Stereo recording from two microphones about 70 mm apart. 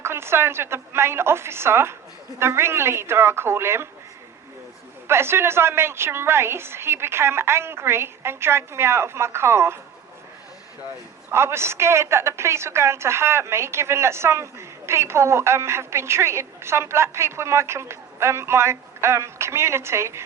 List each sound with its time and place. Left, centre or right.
0.0 s a woman's voice: right
5.0 s a woman's voice: right
11.3 s a woman's voice: right